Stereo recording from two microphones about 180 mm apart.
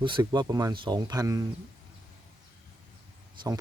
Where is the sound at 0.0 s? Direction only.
25° right (ahead or behind).